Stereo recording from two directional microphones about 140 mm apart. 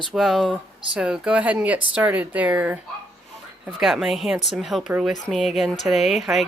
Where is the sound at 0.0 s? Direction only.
Centre (ahead or behind).